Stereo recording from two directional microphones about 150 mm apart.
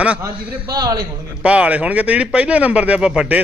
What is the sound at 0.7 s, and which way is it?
Speech, 25° right (ahead or behind).